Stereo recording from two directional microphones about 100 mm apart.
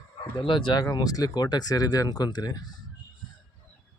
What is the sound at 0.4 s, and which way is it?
Speech, 55° left (ahead or behind).